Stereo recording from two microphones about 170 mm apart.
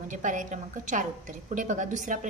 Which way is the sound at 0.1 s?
50° right (ahead or behind).